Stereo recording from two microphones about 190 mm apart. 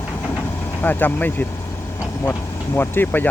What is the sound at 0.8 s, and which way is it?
Speech, 10° left (ahead or behind).